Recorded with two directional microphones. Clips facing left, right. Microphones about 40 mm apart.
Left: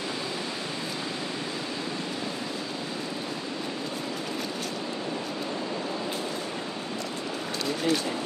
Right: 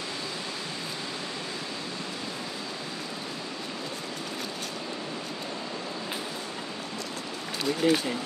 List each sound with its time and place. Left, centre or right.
7.6 s a man's voice: centre